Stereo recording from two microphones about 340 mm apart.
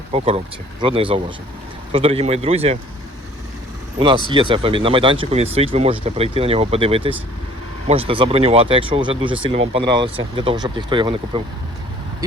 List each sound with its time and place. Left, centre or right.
0.1 s speech: centre
4.3 s speech: centre